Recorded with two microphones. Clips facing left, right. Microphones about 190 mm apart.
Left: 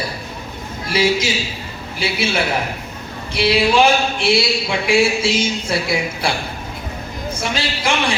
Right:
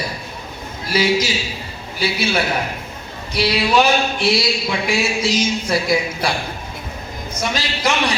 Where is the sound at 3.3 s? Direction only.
25° left (ahead or behind).